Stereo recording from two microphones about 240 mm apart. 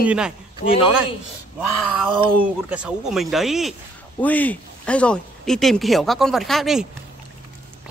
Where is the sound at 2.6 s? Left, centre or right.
Centre.